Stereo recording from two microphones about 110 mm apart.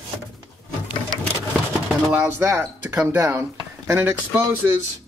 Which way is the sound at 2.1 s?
25° right (ahead or behind).